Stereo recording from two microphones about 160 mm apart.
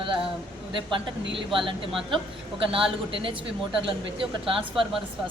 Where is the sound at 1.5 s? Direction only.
30° right (ahead or behind).